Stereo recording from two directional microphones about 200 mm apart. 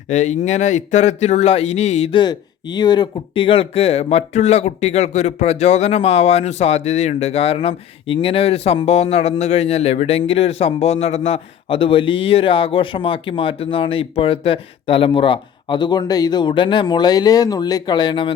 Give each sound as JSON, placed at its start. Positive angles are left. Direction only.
{"t": 0.1, "sound": "speech", "side_deg": 35}
{"t": 2.2, "sound": "speech", "side_deg": 20}